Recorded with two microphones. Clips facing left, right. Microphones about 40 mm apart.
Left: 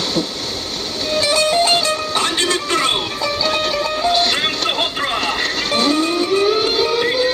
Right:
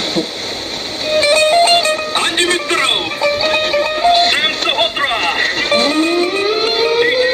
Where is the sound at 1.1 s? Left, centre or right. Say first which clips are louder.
Right 5 dB; right.